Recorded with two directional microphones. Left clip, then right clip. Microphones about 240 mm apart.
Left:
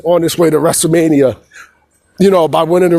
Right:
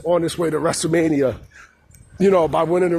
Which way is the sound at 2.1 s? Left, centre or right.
Left.